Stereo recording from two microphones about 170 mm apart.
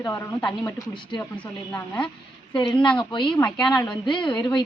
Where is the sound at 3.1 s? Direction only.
30° left (ahead or behind).